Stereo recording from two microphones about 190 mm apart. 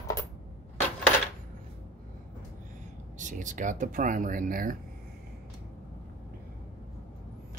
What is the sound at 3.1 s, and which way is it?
Speech, 40° right (ahead or behind).